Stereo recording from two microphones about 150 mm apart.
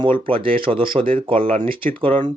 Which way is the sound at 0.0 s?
35° right (ahead or behind).